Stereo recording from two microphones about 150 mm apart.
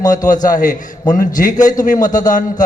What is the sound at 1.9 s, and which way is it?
Speech, 25° left (ahead or behind).